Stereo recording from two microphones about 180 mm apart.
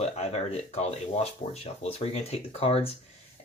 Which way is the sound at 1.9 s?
35° left (ahead or behind).